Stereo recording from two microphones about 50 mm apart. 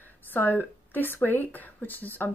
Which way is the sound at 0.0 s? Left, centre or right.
Left.